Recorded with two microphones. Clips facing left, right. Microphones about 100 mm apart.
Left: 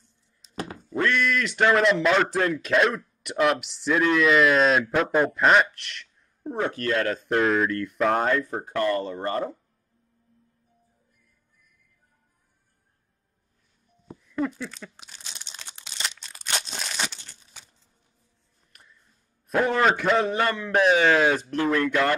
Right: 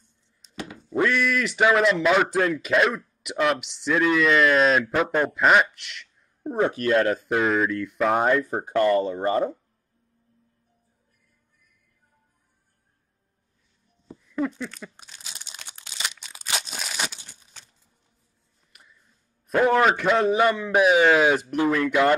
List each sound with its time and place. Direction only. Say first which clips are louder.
0.4 s thunk: right 1 dB; centre (ahead or behind)
0.9 s speech: right 1 dB; 5° right (ahead or behind)
6.5 s speech: right 4 dB; 15° right (ahead or behind)
7.2 s speech: even; centre (ahead or behind)
8.2 s speech: right 3 dB; 10° right (ahead or behind)
8.5 s speech: right 4 dB; 20° right (ahead or behind)
14.2 s crumpling: right 1 dB; centre (ahead or behind)
18.7 s music: even; 5° right (ahead or behind)
19.4 s a sound: right 3 dB; centre (ahead or behind)
19.8 s speech: right 1 dB; centre (ahead or behind)
21.6 s speech: even; centre (ahead or behind)